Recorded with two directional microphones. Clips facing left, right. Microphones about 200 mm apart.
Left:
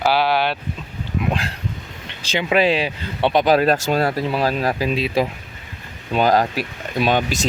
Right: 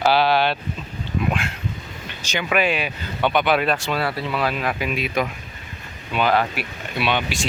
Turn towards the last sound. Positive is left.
turn(degrees=40)  # may be behind; listen again after turning